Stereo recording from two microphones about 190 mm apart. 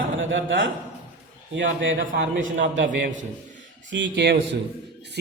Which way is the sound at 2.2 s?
85° right.